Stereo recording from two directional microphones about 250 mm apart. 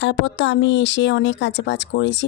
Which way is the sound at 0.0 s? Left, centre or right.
Left.